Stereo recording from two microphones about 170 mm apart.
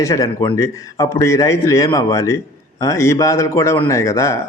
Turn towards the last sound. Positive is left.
turn(degrees=20)  # may be behind; listen again after turning